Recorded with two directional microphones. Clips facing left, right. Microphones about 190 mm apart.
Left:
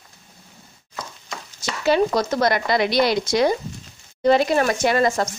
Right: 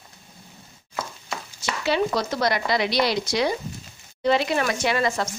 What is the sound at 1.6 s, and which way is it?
Speech, 45° left (ahead or behind).